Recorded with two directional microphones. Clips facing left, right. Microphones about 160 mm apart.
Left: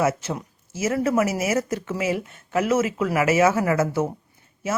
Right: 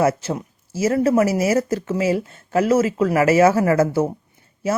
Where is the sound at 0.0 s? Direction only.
35° right (ahead or behind).